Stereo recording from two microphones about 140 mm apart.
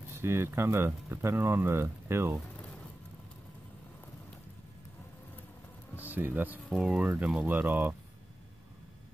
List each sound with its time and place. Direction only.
0.1 s speech: 20° right (ahead or behind)
6.0 s speech: 15° right (ahead or behind)